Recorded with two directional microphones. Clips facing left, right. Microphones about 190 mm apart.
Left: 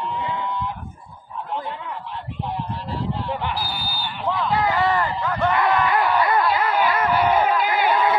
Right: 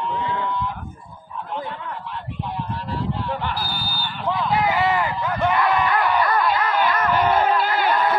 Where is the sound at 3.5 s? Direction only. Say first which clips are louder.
Even; 5° left (ahead or behind).